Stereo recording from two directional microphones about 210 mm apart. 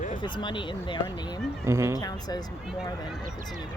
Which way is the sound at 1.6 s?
15° right (ahead or behind).